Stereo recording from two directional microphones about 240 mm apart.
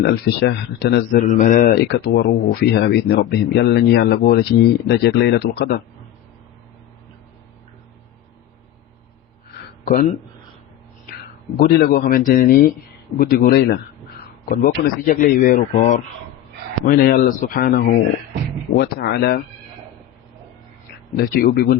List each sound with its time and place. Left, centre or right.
0.0 s speech: left
1.3 s speech: left
9.8 s speech: left
11.5 s speech: left
21.2 s speech: left